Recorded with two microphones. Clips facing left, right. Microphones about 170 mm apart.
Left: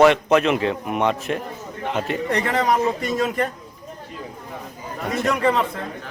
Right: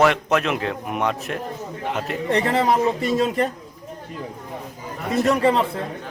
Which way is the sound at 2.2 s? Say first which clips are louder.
Right 3 dB; 30° right (ahead or behind).